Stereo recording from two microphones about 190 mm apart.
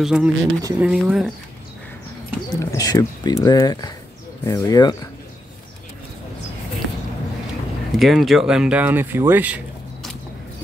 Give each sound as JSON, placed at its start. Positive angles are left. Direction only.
{"t": 0.0, "sound": "speech", "side_deg": -5}
{"t": 0.6, "sound": "speech", "side_deg": -20}
{"t": 0.8, "sound": "speech", "side_deg": -5}
{"t": 2.5, "sound": "speech", "side_deg": 20}
{"t": 7.9, "sound": "speech", "side_deg": 0}